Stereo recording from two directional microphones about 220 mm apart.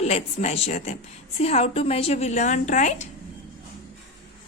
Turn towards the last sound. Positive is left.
turn(degrees=35)  # may be behind; listen again after turning